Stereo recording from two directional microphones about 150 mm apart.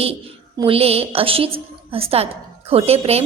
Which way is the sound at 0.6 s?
40° right (ahead or behind).